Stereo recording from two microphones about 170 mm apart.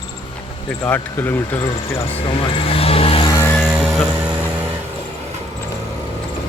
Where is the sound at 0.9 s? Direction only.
10° left (ahead or behind).